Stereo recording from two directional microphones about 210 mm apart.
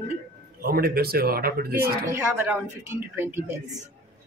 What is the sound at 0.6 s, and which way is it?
Speech, 45° right (ahead or behind).